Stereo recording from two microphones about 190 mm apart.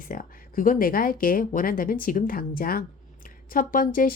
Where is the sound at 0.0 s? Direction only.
45° left (ahead or behind).